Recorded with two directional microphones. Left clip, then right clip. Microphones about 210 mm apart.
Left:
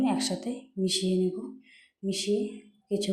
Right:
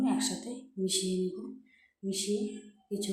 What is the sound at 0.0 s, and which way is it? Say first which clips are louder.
Speech: left 3 dB; 25° left (ahead or behind).